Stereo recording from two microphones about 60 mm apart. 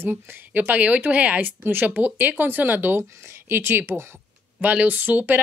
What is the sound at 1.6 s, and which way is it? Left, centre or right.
Speech, right.